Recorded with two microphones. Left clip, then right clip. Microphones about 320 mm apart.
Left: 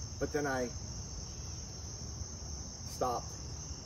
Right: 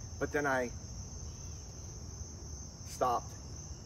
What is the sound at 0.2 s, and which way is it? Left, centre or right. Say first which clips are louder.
Cricket: right 2 dB; centre.